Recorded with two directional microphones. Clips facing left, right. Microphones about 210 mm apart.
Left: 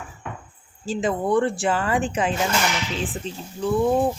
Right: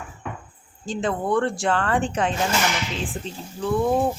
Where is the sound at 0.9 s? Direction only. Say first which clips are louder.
Left 2 dB; 5° left (ahead or behind).